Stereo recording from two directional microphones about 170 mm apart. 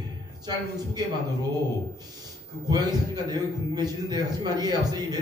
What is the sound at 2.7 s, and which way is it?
A man's voice, 25° right (ahead or behind).